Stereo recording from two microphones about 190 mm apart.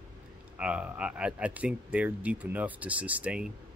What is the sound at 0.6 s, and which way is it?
Speech, 5° right (ahead or behind).